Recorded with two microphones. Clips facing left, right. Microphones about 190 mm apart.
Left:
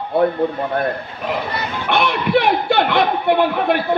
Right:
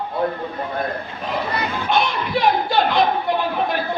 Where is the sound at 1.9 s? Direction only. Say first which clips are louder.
Left 5 dB; 65° left (ahead or behind).